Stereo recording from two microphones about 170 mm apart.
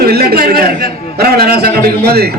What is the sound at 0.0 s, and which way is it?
A man's voice, 65° right (ahead or behind).